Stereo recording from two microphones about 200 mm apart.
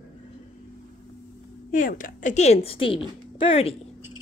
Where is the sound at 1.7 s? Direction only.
40° left (ahead or behind).